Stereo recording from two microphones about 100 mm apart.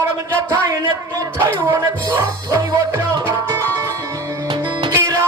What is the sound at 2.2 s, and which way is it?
Music, 25° right (ahead or behind).